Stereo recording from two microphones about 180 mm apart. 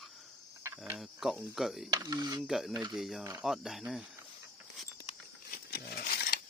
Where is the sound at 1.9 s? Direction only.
20° right (ahead or behind).